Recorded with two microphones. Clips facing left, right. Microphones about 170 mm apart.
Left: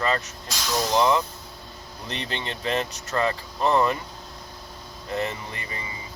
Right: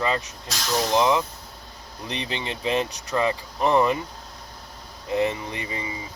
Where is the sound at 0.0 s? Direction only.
15° right (ahead or behind).